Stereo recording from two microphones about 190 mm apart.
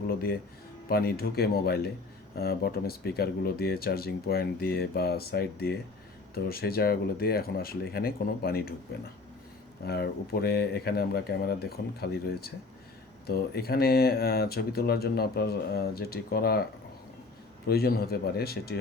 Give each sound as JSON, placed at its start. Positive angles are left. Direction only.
{"t": 0.1, "sound": "speech", "side_deg": 55}
{"t": 17.7, "sound": "speech", "side_deg": 55}